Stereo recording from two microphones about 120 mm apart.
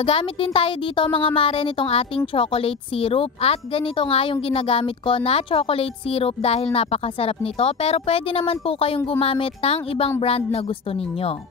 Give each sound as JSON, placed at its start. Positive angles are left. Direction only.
{"t": 0.0, "sound": "speech", "side_deg": 50}